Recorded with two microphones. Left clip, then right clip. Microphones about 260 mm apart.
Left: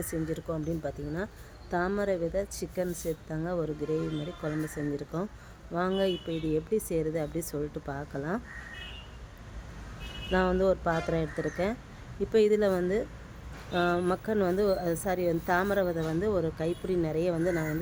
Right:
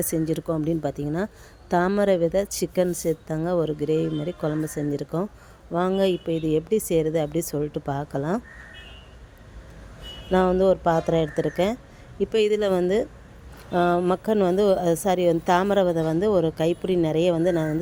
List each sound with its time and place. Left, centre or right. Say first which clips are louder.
0.0 s a woman's voice: right 8 dB; right
10.3 s a woman's voice: right 7 dB; right